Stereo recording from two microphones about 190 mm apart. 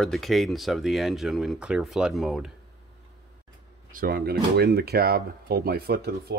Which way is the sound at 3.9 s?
50° right (ahead or behind).